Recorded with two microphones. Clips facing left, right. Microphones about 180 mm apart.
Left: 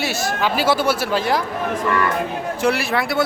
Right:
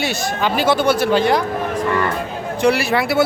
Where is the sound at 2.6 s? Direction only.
Centre (ahead or behind).